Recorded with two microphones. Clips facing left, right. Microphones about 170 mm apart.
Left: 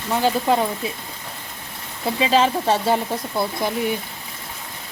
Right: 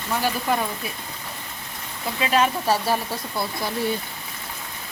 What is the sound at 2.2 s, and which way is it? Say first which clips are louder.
Speech: left 3 dB; 25° left (ahead or behind).